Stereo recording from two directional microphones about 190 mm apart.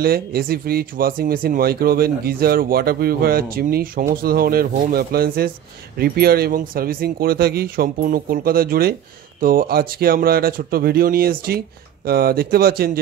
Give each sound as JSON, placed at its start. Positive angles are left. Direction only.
{"t": 0.0, "sound": "speech", "side_deg": -55}